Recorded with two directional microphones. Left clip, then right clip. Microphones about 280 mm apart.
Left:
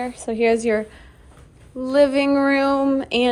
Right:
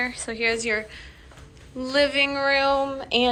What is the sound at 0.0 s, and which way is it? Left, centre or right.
Speech, centre.